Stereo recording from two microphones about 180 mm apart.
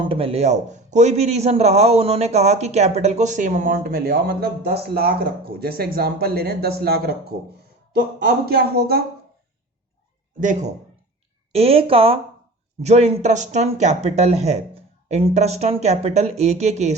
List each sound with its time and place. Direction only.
0.0 s a man's voice: 30° right (ahead or behind); by 7.3 s 60° right (ahead or behind)
8.4 s speech: 60° right (ahead or behind)
10.4 s speech: 45° right (ahead or behind)
11.5 s a man's voice: 35° right (ahead or behind)